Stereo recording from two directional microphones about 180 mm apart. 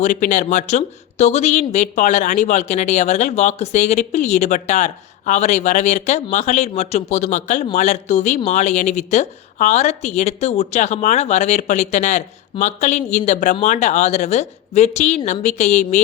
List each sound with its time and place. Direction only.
0.0 s a woman's voice: 40° left (ahead or behind)